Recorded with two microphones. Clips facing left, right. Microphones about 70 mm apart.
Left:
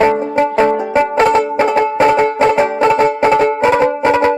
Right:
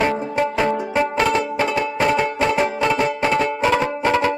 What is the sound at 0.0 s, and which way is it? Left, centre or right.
Music, left.